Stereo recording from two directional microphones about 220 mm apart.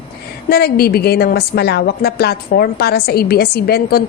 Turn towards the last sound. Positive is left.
turn(degrees=45)  # may be behind; listen again after turning